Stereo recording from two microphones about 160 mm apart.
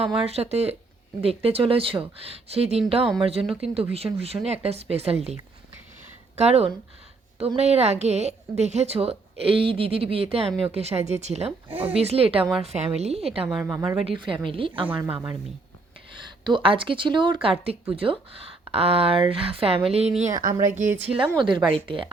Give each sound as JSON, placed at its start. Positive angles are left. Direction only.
{"t": 0.3, "sound": "a woman's voice", "side_deg": -40}
{"t": 11.7, "sound": "speech", "side_deg": -10}
{"t": 11.9, "sound": "a woman's voice", "side_deg": -40}
{"t": 13.6, "sound": "speech", "side_deg": -15}
{"t": 13.8, "sound": "a woman's voice", "side_deg": -35}
{"t": 20.3, "sound": "a woman's voice", "side_deg": -25}